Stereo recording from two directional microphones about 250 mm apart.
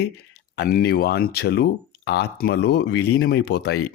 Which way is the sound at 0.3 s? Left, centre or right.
Left.